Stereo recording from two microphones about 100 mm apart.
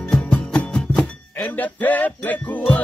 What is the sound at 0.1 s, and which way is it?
Music, 10° left (ahead or behind).